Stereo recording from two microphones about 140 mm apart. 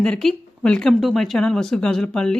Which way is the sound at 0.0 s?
5° left (ahead or behind).